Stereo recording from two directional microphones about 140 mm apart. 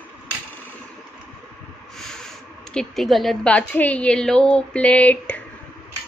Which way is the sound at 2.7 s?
Centre (ahead or behind).